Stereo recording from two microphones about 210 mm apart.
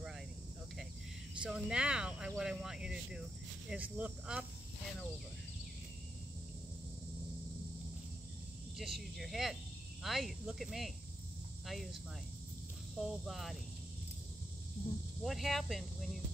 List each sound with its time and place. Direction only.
1.4 s speech: 5° right (ahead or behind)
8.7 s speech: centre (ahead or behind)
13.0 s speech: centre (ahead or behind)
15.2 s speech: centre (ahead or behind)